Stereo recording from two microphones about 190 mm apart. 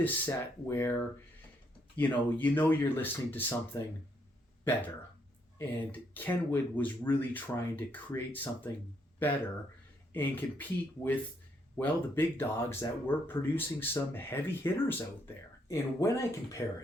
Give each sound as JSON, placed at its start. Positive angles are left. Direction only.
{"t": 0.0, "sound": "speech", "side_deg": 15}
{"t": 5.5, "sound": "speech", "side_deg": 10}